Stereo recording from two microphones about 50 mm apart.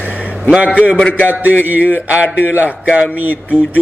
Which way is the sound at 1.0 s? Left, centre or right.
Left.